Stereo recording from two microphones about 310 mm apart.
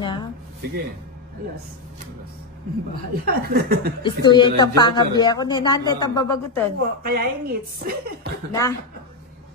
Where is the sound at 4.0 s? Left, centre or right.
Centre.